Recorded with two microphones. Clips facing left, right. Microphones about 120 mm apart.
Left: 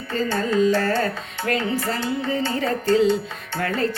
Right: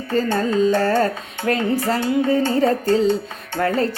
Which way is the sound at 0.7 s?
30° right (ahead or behind).